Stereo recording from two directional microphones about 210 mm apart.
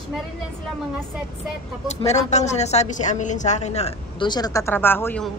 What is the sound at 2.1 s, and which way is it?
A woman's voice, 30° left (ahead or behind).